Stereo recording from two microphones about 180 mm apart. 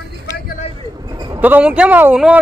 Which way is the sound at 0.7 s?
25° right (ahead or behind).